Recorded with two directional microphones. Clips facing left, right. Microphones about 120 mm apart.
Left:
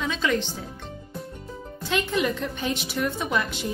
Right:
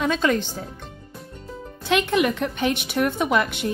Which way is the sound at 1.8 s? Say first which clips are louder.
Right 5 dB; 70° right (ahead or behind).